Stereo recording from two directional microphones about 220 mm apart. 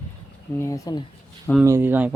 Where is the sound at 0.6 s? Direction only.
15° left (ahead or behind).